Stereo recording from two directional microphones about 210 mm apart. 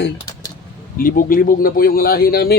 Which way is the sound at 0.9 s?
40° left (ahead or behind).